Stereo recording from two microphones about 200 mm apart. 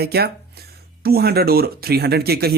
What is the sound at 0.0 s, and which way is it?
Speech, 50° right (ahead or behind).